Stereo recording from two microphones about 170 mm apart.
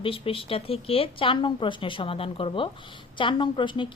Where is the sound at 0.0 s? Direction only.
30° left (ahead or behind).